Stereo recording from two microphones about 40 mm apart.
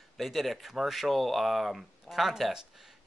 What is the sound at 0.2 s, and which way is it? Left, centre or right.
Speech, centre.